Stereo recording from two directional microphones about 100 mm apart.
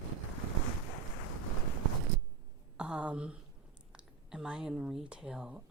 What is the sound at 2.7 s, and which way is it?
Speech, 10° right (ahead or behind).